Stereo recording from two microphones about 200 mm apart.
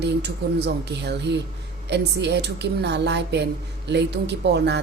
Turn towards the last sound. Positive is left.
turn(degrees=-55)  # may be behind; listen again after turning